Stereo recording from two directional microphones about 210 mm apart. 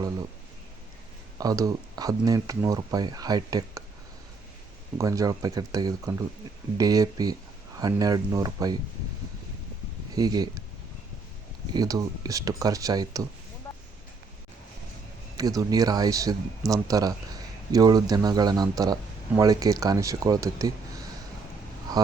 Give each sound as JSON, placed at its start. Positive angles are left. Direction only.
{"t": 1.4, "sound": "speech", "side_deg": -15}
{"t": 4.9, "sound": "speech", "side_deg": -15}
{"t": 10.2, "sound": "speech", "side_deg": -20}
{"t": 11.7, "sound": "speech", "side_deg": -20}
{"t": 15.4, "sound": "speech", "side_deg": -15}
{"t": 21.9, "sound": "a sound", "side_deg": -20}